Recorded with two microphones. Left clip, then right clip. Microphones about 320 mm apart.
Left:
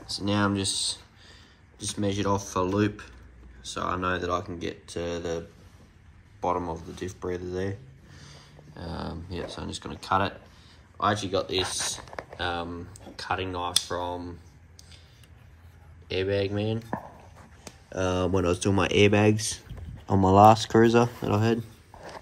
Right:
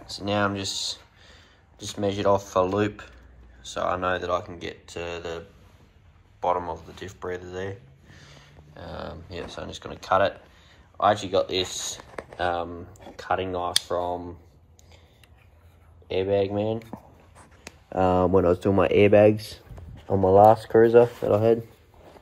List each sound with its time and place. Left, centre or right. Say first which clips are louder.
0.0 s speech: right 2 dB; centre
6.4 s speech: right 3 dB; centre
16.1 s speech: right 4 dB; centre
17.9 s speech: right 6 dB; centre
20.2 s speech: right 1 dB; centre